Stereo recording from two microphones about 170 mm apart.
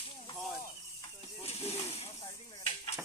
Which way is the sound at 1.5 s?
35° left (ahead or behind).